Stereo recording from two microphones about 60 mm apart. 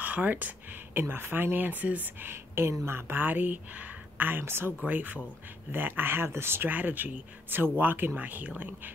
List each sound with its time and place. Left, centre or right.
0.0 s speech: right
2.3 s speech: right
4.8 s speech: right
6.7 s speech: right